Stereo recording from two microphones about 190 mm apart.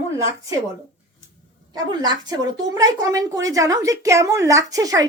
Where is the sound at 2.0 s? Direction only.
20° right (ahead or behind).